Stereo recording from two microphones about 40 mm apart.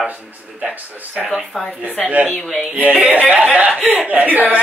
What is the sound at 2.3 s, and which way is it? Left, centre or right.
Music, centre.